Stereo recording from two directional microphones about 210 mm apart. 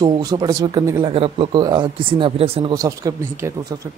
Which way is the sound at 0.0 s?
20° right (ahead or behind).